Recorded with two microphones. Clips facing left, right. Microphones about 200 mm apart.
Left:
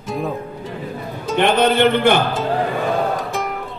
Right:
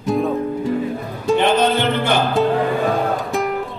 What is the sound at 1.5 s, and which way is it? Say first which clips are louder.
Music: left 2 dB; 60° left (ahead or behind).